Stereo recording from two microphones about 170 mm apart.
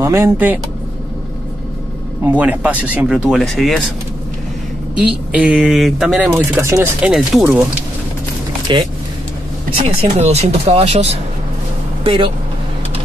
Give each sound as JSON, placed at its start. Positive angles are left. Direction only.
{"t": 0.0, "sound": "speech", "side_deg": -15}
{"t": 2.2, "sound": "speech", "side_deg": -10}
{"t": 4.9, "sound": "speech", "side_deg": -5}
{"t": 7.1, "sound": "speech", "side_deg": 0}
{"t": 8.7, "sound": "speech", "side_deg": -25}